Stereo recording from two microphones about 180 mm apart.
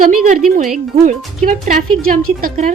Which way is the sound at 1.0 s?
45° right (ahead or behind).